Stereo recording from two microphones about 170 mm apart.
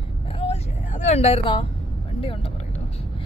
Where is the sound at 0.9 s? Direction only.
40° left (ahead or behind).